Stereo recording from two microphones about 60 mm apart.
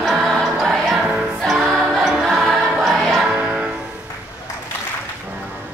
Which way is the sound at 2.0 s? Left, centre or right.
Centre.